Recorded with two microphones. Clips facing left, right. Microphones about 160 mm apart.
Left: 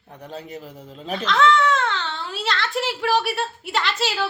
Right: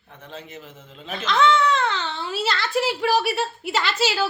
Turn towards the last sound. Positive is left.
turn(degrees=0)  # may be behind; listen again after turning